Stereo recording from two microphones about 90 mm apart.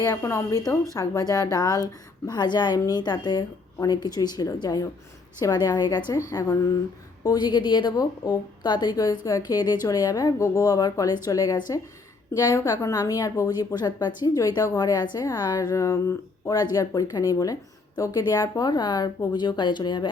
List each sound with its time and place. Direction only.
0.0 s a woman's voice: 35° left (ahead or behind)
6.1 s a woman's voice: 35° left (ahead or behind)
7.3 s a woman's voice: 55° left (ahead or behind)
12.5 s a woman's voice: 40° left (ahead or behind)
13.7 s a woman's voice: 50° left (ahead or behind)